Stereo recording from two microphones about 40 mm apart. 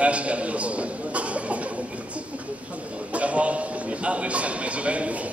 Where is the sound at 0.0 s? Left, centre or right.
Right.